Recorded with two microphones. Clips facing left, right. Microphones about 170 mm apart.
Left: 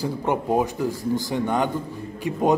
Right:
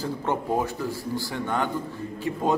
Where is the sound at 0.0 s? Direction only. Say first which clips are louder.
Left 3 dB; 15° left (ahead or behind).